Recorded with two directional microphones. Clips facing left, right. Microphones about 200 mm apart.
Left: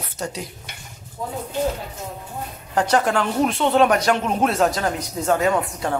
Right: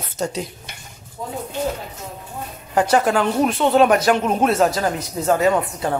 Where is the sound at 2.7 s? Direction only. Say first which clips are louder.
Right 2 dB; 5° right (ahead or behind).